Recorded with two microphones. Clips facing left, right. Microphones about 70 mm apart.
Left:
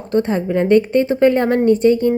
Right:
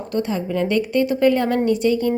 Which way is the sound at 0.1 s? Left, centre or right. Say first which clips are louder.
Left 6 dB; left.